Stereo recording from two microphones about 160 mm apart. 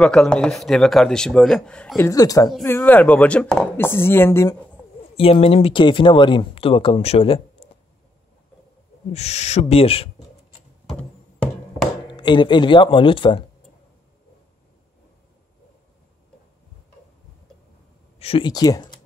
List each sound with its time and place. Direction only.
0.0 s speech: 5° left (ahead or behind)
2.0 s speech: 20° left (ahead or behind)
5.1 s speech: 35° left (ahead or behind)
9.1 s speech: 45° left (ahead or behind)
12.1 s speech: 30° left (ahead or behind)
18.2 s speech: 35° left (ahead or behind)
18.5 s speech: 25° left (ahead or behind)